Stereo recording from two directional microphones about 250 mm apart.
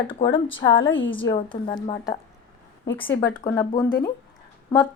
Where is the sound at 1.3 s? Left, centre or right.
Centre.